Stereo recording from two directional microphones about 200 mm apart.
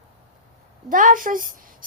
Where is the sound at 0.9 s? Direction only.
40° right (ahead or behind).